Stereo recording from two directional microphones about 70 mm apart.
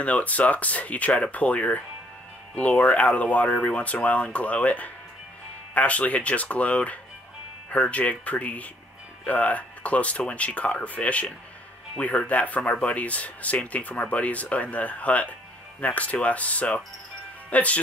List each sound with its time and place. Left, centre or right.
0.0 s speech: centre